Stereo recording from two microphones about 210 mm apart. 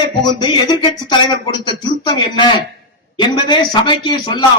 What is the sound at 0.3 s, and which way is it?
A man's voice, 20° left (ahead or behind).